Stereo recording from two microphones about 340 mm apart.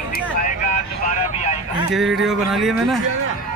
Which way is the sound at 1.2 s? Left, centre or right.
Centre.